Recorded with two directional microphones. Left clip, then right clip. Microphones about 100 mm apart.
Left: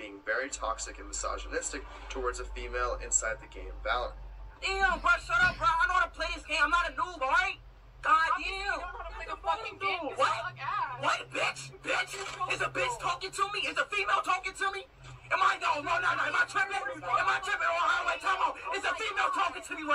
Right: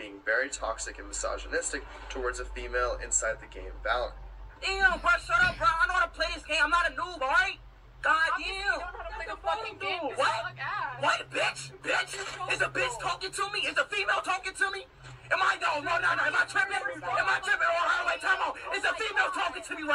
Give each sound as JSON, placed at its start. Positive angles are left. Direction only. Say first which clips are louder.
{"t": 0.0, "sound": "a man's voice", "louder": "right 4 dB", "side_deg": -20}